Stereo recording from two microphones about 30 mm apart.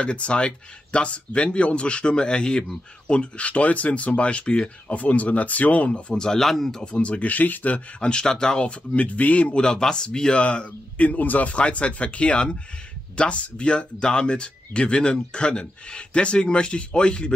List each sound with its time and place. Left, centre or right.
0.0 s speech: left
3.1 s speech: left
4.2 s speech: left
4.8 s speech: left
5.9 s speech: left
6.1 s speech: left
6.4 s speech: centre
6.8 s speech: left
7.2 s speech: left
8.0 s speech: left
8.6 s speech: left
9.6 s speech: left
11.0 s speech: left
11.5 s speech: left